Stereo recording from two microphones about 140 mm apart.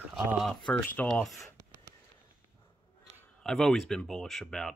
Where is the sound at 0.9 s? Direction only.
10° left (ahead or behind).